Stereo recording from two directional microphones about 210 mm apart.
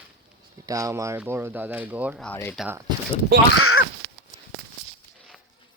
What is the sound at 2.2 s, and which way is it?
Speech, 10° left (ahead or behind).